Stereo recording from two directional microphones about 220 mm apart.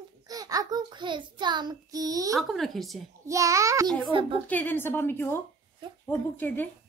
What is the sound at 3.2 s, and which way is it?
A child's voice, 15° right (ahead or behind).